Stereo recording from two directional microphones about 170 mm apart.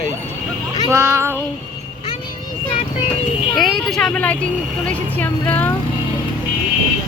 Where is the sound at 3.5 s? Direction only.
Centre (ahead or behind).